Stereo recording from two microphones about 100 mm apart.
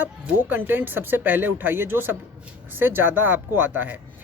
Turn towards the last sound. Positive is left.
turn(degrees=-20)  # may be behind; listen again after turning